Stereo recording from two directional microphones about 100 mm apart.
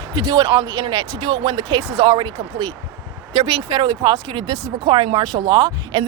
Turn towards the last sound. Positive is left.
turn(degrees=-45)  # may be behind; listen again after turning